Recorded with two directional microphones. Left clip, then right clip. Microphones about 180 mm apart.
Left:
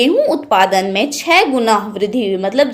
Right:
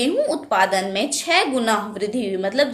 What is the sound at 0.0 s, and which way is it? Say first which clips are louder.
A woman's voice: left 8 dB; 35° left (ahead or behind).